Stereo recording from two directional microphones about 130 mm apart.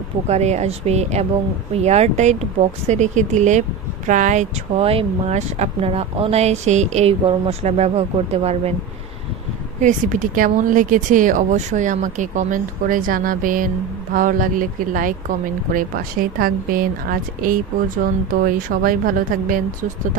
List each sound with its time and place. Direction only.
0.3 s a woman's voice: 60° right (ahead or behind)
4.8 s speech: 55° right (ahead or behind)
9.8 s speech: 85° right